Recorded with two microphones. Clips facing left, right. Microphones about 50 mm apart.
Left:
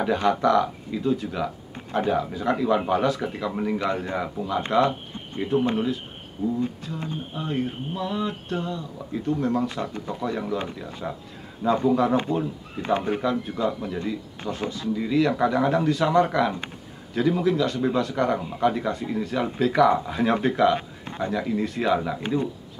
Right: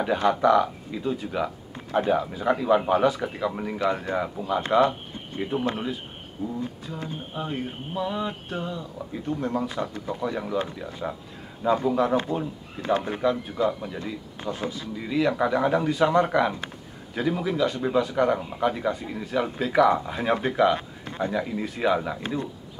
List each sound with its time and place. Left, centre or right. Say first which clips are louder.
0.0 s speech: even; centre
5.4 s speech: left 4 dB; centre
6.4 s speech: left 5 dB; right
7.3 s speech: left 3 dB; centre
11.9 s speech: left 2 dB; centre